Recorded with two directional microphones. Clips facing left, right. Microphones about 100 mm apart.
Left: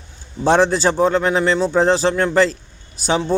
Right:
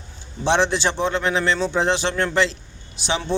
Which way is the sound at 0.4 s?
40° left (ahead or behind).